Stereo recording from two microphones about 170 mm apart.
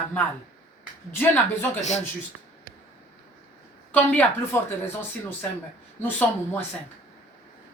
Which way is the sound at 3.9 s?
10° left (ahead or behind).